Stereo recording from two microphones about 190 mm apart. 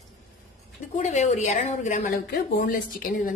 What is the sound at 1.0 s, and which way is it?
A woman's voice, 35° left (ahead or behind).